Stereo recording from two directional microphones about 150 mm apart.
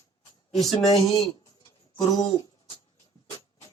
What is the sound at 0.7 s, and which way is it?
Speech, 35° left (ahead or behind).